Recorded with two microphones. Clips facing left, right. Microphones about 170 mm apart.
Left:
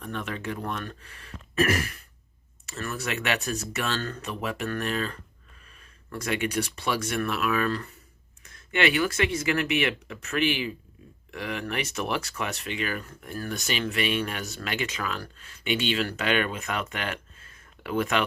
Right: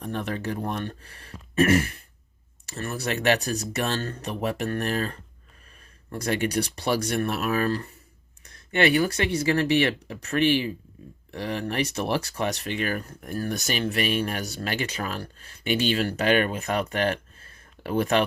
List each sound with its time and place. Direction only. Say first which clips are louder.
0.0 s speech: right 4 dB; 35° right (ahead or behind)